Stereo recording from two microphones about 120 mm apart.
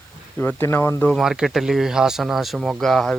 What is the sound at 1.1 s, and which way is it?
Speech, 5° right (ahead or behind).